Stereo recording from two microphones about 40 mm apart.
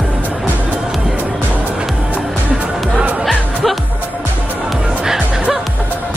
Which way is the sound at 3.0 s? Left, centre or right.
Right.